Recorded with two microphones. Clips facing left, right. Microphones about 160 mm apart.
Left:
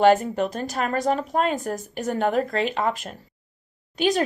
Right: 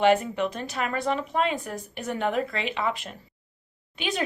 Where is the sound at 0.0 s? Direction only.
40° left (ahead or behind).